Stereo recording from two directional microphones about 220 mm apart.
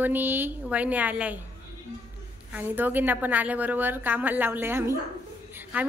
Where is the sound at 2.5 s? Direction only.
10° right (ahead or behind).